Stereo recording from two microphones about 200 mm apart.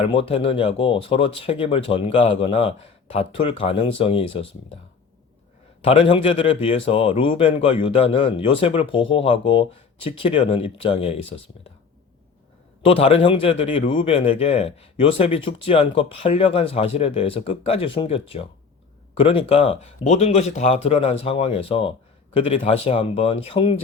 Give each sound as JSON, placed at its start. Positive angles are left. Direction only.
{"t": 0.0, "sound": "a man's voice", "side_deg": 30}
{"t": 5.8, "sound": "a man's voice", "side_deg": 30}
{"t": 12.8, "sound": "a man's voice", "side_deg": 25}